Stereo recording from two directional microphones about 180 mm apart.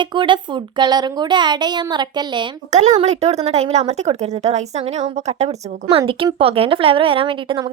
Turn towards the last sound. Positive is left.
turn(degrees=-30)  # may be behind; listen again after turning